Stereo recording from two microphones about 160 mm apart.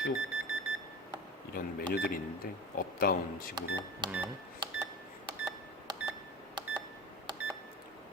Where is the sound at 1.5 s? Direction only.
80° left.